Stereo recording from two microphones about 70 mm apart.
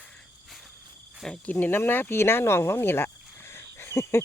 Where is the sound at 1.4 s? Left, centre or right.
Left.